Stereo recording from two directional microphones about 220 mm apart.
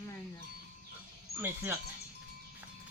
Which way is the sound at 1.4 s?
10° right (ahead or behind).